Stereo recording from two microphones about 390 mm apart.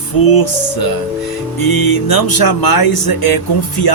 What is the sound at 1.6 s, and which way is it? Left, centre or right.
Speech, left.